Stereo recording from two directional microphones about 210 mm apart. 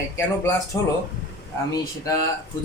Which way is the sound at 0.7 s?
15° left (ahead or behind).